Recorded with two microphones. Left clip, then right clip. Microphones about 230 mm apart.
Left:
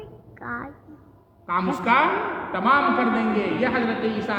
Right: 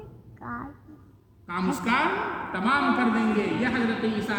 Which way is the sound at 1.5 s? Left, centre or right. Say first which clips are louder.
Left 6 dB; centre.